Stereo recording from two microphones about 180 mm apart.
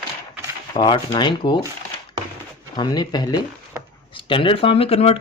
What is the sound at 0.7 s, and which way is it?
Speech, 25° left (ahead or behind).